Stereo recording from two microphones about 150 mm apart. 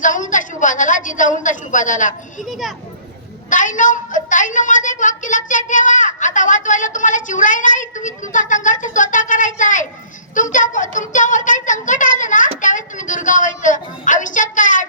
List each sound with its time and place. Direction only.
0.0 s a sound: 60° left (ahead or behind)
2.4 s a child's voice: centre (ahead or behind)
3.5 s a woman's voice: 60° left (ahead or behind)